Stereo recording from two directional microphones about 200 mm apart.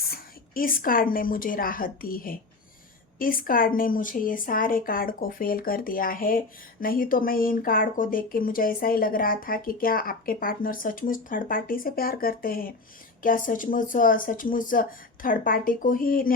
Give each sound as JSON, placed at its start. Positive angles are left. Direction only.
{"t": 0.1, "sound": "a woman's voice", "side_deg": 45}